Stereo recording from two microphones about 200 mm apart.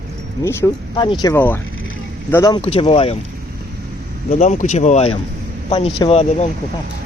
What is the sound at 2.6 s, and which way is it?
Speech, 30° left (ahead or behind).